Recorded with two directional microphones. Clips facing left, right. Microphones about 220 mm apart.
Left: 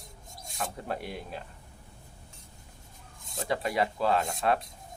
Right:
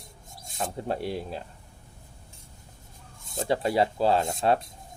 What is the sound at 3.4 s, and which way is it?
Speech, 30° right (ahead or behind).